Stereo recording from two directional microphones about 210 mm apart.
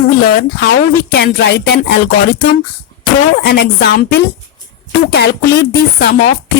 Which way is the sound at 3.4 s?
55° left (ahead or behind).